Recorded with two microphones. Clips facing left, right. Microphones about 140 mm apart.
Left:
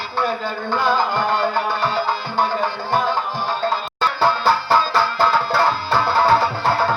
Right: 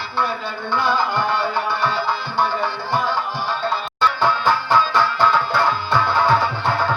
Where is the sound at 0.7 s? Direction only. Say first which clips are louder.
Left 1 dB; 45° left (ahead or behind).